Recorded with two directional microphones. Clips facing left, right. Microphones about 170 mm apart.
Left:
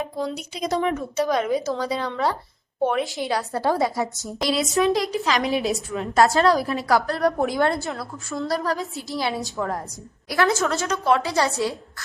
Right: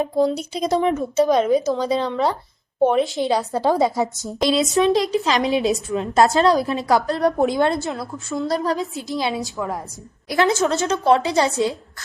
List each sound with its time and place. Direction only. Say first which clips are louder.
0.0 s a woman's voice: right 8 dB; 35° right (ahead or behind)
9.6 s a woman's voice: even; 10° right (ahead or behind)
10.2 s a woman's voice: right 3 dB; 20° right (ahead or behind)